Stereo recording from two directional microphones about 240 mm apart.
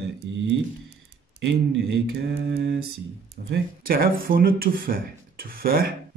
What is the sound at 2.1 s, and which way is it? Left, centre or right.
A man's voice, right.